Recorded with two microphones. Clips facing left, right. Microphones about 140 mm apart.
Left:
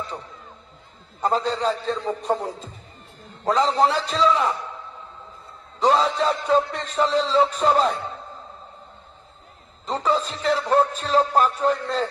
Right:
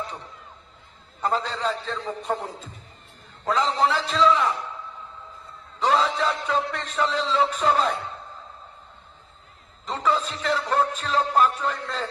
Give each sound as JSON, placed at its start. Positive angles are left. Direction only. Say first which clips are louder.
{"t": 1.2, "sound": "speech", "louder": "left 3 dB", "side_deg": 35}
{"t": 3.4, "sound": "speech", "louder": "left 3 dB", "side_deg": 35}
{"t": 5.8, "sound": "speech", "louder": "left 3 dB", "side_deg": 35}
{"t": 9.8, "sound": "speech", "louder": "left 2 dB", "side_deg": 35}